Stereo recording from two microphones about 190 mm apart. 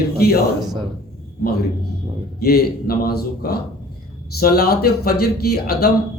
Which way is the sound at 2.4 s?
55° left (ahead or behind).